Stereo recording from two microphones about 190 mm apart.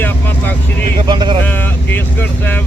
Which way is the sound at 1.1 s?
25° right (ahead or behind).